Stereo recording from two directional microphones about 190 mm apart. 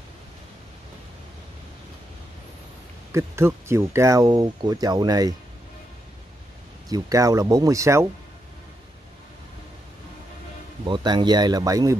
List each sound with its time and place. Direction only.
3.1 s speech: 15° right (ahead or behind)
6.9 s speech: 20° right (ahead or behind)
10.9 s speech: 25° right (ahead or behind)